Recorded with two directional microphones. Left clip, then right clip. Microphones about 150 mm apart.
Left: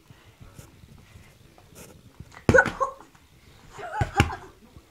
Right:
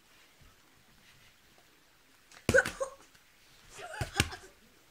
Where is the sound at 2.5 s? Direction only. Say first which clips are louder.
Left 8 dB; 30° right (ahead or behind).